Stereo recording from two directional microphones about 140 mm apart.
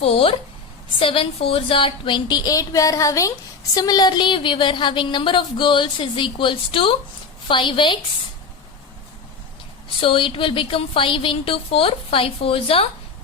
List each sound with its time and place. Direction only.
0.0 s a woman's voice: 45° left (ahead or behind)
10.0 s speech: 40° left (ahead or behind)